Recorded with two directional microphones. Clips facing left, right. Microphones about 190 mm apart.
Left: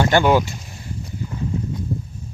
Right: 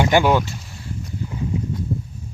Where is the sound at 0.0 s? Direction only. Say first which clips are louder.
Even; 10° right (ahead or behind).